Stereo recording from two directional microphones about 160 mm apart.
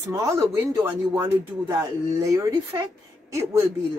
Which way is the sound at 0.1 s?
20° right (ahead or behind).